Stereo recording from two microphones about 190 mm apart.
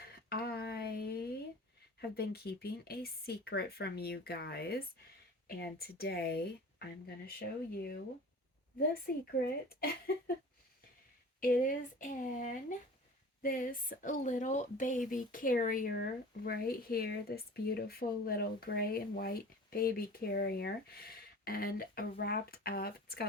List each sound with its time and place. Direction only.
0.3 s a sound: 55° left (ahead or behind)
2.0 s speech: 55° left (ahead or behind)
9.1 s speech: 55° left (ahead or behind)
11.3 s speech: 45° left (ahead or behind)